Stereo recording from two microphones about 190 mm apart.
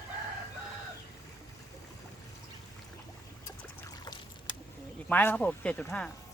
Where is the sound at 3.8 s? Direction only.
20° left (ahead or behind).